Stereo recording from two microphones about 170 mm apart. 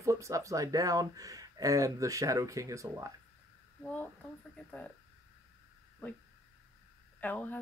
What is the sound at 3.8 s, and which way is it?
Speech, 10° left (ahead or behind).